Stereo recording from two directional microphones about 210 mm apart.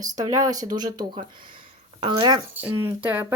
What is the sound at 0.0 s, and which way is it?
Speech, 15° right (ahead or behind).